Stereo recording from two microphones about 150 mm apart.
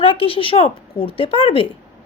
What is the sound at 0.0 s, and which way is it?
Speech, 35° left (ahead or behind).